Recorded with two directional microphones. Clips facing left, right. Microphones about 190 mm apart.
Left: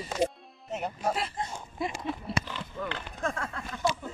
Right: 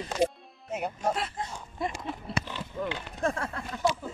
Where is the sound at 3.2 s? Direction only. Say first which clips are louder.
Right 4 dB; 30° right (ahead or behind).